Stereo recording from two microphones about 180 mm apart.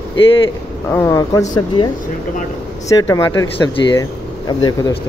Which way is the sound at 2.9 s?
15° left (ahead or behind).